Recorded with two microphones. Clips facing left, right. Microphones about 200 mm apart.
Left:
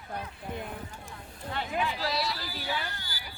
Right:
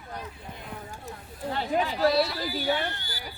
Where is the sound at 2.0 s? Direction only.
55° right (ahead or behind).